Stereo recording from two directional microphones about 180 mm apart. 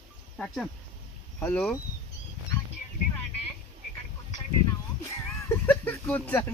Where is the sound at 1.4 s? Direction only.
10° left (ahead or behind).